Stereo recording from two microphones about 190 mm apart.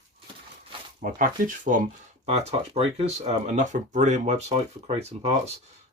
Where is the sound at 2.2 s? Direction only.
35° right (ahead or behind).